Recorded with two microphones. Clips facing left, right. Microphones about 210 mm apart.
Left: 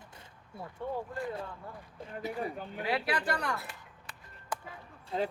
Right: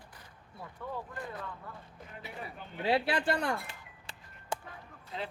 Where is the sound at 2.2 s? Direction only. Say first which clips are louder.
Left 9 dB; 40° left (ahead or behind).